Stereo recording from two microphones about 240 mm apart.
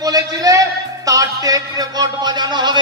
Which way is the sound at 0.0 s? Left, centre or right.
Centre.